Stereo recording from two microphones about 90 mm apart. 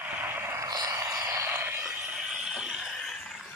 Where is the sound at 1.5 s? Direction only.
25° right (ahead or behind).